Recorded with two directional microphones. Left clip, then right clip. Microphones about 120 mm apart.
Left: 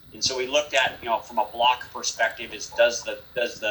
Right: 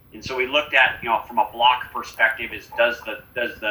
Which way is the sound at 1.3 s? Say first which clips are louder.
Right 4 dB; 30° left (ahead or behind).